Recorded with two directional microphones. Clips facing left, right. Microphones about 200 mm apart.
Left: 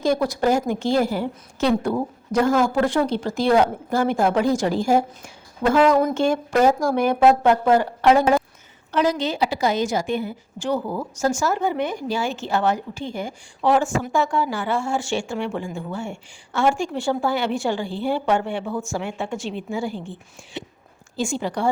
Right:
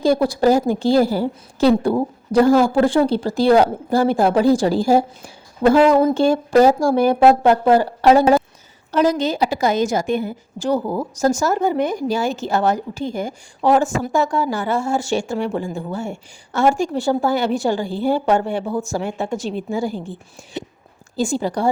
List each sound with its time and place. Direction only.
0.0 s a woman's voice: 30° right (ahead or behind)